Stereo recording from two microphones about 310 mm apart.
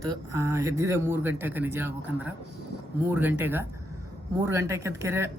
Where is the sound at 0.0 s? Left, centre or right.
Centre.